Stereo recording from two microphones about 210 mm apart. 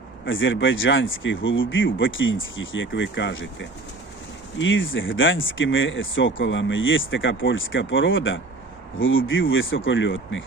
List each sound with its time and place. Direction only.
0.3 s speech: 65° left (ahead or behind)